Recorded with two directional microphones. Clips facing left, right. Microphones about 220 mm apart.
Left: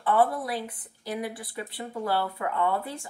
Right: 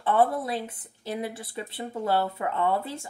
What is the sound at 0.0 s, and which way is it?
Speech, 25° right (ahead or behind).